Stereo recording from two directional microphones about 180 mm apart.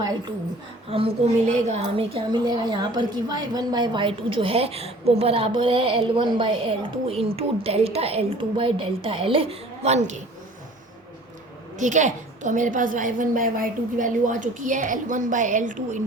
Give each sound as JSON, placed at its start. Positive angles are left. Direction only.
{"t": 0.0, "sound": "a woman's voice", "side_deg": -20}
{"t": 0.9, "sound": "a woman's voice", "side_deg": -35}
{"t": 11.8, "sound": "a woman's voice", "side_deg": -45}